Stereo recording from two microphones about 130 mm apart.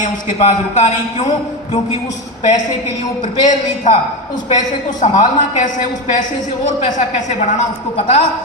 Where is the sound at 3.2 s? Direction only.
65° left (ahead or behind).